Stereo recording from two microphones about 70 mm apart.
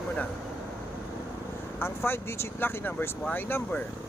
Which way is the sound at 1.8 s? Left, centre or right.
Left.